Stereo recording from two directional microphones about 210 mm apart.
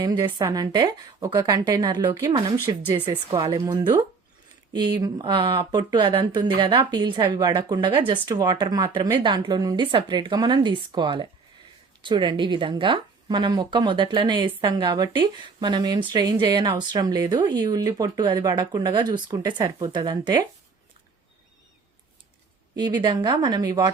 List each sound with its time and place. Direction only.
0.0 s a woman's voice: 15° right (ahead or behind)
22.7 s speech: 20° right (ahead or behind)